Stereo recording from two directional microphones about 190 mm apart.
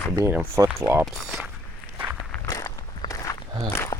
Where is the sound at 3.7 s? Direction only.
15° left (ahead or behind).